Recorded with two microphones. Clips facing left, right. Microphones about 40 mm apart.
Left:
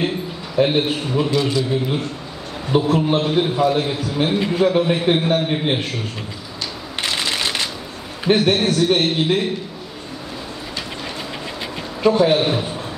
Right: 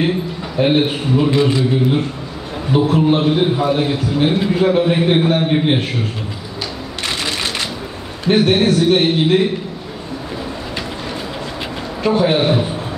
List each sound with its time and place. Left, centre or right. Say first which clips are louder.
0.7 s a man's voice: right 4 dB; centre
1.3 s a man's voice: right 4 dB; right
2.7 s a man's voice: right 3 dB; centre
8.4 s a man's voice: right 6 dB; centre
12.0 s a man's voice: even; centre